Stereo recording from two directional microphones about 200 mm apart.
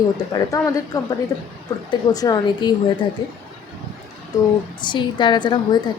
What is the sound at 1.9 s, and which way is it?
Speech, 20° left (ahead or behind).